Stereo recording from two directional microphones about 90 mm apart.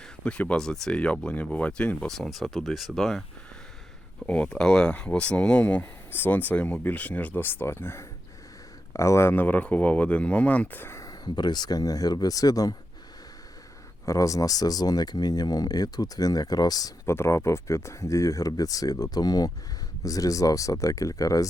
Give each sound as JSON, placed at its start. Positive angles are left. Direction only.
{"t": 0.3, "sound": "speech", "side_deg": 10}
{"t": 2.0, "sound": "speech", "side_deg": 5}
{"t": 4.3, "sound": "speech", "side_deg": 10}
{"t": 11.0, "sound": "speech", "side_deg": 50}
{"t": 14.0, "sound": "speech", "side_deg": 35}
{"t": 17.1, "sound": "speech", "side_deg": 30}